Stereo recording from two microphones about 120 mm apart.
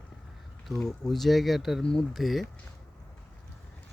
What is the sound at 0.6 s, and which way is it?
Speech, 5° left (ahead or behind).